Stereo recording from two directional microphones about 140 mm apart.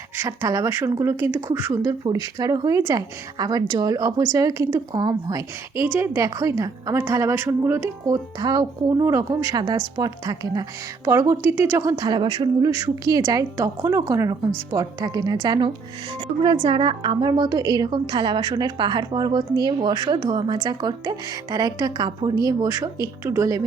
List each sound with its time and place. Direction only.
0.2 s a woman's voice: 20° right (ahead or behind)